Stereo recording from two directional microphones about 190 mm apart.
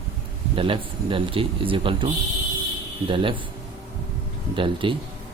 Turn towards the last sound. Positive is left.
turn(degrees=-25)  # may be behind; listen again after turning